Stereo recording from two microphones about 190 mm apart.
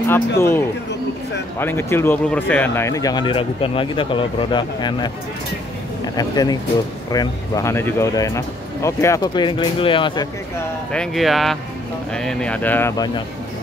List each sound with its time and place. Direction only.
0.1 s speech: 10° left (ahead or behind)
6.1 s speech: 20° left (ahead or behind)
10.9 s speech: centre (ahead or behind); by 13.2 s 20° left (ahead or behind)